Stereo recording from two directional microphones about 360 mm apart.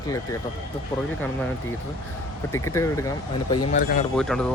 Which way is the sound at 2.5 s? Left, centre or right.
Centre.